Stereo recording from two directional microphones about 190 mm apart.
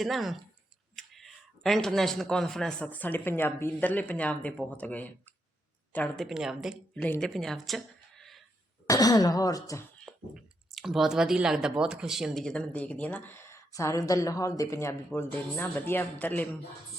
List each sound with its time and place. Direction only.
0.0 s speech: centre (ahead or behind)
8.9 s speech: 20° left (ahead or behind)
10.1 s speech: centre (ahead or behind)